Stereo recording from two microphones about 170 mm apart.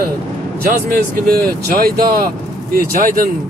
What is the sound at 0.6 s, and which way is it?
Speech, 60° right (ahead or behind).